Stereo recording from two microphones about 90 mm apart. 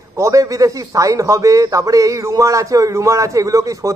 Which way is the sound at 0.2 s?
40° right (ahead or behind).